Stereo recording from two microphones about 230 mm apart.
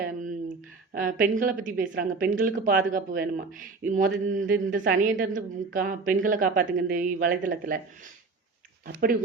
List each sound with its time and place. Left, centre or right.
0.0 s a sound: right
1.2 s a woman's voice: right
4.8 s a woman's voice: right
8.9 s a woman's voice: right